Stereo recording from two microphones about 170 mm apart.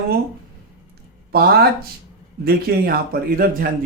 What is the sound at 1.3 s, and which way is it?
A man's voice, 65° right (ahead or behind).